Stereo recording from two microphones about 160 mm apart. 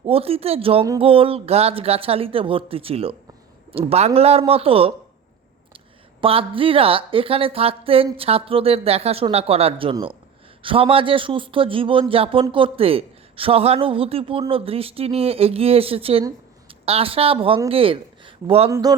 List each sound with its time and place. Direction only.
0.0 s a woman's voice: 35° right (ahead or behind)
6.2 s a woman's voice: 35° right (ahead or behind)
18.7 s speech: 25° right (ahead or behind)